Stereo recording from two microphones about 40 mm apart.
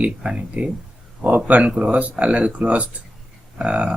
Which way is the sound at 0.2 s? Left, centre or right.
Right.